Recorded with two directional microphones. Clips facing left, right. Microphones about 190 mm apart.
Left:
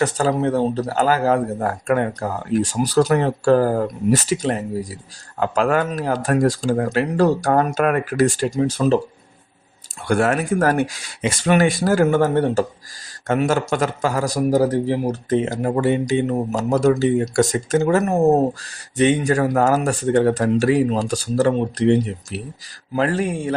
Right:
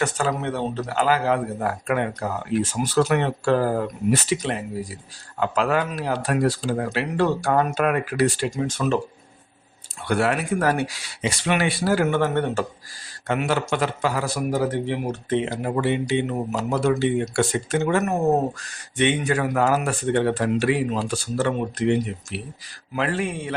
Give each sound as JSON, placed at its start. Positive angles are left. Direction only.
{"t": 0.0, "sound": "a man's voice", "side_deg": 35}
{"t": 10.1, "sound": "a man's voice", "side_deg": 45}